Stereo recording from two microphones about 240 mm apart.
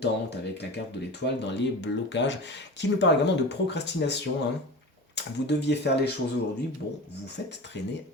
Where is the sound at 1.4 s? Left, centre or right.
Left.